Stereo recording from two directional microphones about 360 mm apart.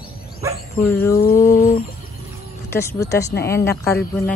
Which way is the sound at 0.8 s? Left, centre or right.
Centre.